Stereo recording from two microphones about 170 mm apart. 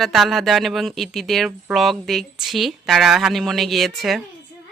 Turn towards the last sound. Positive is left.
turn(degrees=0)  # may be behind; listen again after turning